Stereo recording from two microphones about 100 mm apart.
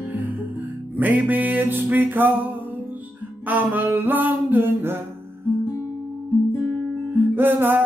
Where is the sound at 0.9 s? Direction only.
15° right (ahead or behind).